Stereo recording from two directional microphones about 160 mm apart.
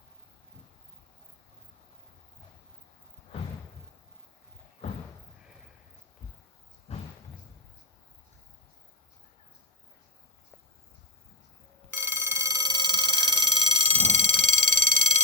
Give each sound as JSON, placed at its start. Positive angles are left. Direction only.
{"t": 4.8, "sound": "slam", "side_deg": 40}
{"t": 6.9, "sound": "a sound", "side_deg": 40}
{"t": 11.9, "sound": "telephone", "side_deg": -15}
{"t": 13.8, "sound": "alarm", "side_deg": -40}